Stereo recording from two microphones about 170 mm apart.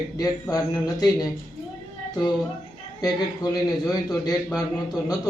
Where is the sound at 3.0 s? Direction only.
20° left (ahead or behind).